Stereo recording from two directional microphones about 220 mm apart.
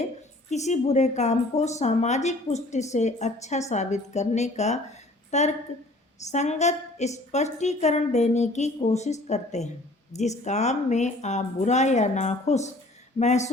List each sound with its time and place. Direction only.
0.5 s a woman's voice: 30° left (ahead or behind)